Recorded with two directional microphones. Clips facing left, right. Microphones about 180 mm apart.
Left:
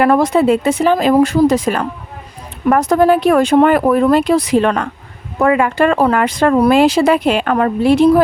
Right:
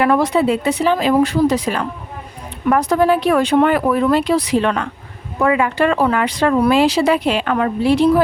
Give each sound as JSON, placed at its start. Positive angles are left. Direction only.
{"t": 0.0, "sound": "speech", "side_deg": 45}